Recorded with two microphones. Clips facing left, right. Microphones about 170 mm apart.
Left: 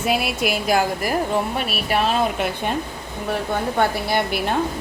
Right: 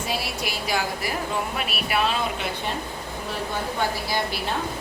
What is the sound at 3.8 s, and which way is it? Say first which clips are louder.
Speech: left 6 dB; 60° left (ahead or behind).